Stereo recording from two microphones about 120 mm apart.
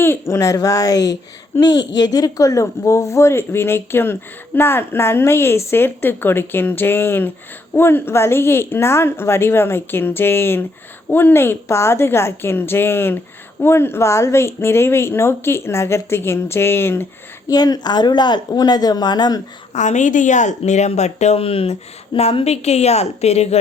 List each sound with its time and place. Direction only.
0.0 s speech: 20° left (ahead or behind)
17.5 s speech: 35° left (ahead or behind)
19.7 s speech: 85° left; by 23.6 s 60° left (ahead or behind)